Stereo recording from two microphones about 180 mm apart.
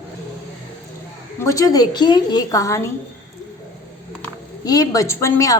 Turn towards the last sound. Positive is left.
turn(degrees=15)  # may be behind; listen again after turning